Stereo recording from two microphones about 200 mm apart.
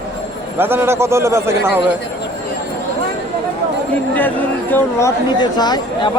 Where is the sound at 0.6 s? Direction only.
10° right (ahead or behind).